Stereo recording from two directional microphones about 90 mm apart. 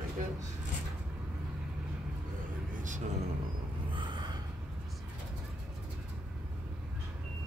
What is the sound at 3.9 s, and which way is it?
Gasp, 60° right (ahead or behind).